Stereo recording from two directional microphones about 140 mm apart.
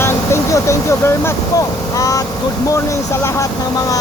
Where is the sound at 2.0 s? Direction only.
25° left (ahead or behind).